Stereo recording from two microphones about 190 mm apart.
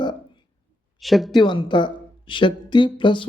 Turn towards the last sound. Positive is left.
turn(degrees=25)  # may be behind; listen again after turning